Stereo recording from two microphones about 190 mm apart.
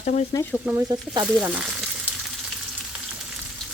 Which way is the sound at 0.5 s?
10° right (ahead or behind).